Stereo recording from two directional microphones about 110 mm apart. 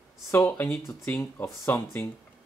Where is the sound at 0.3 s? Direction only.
20° left (ahead or behind).